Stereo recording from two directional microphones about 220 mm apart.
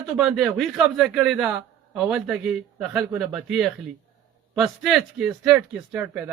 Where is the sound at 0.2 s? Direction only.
Centre (ahead or behind).